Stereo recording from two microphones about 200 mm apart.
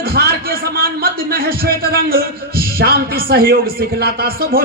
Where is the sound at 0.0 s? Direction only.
50° right (ahead or behind).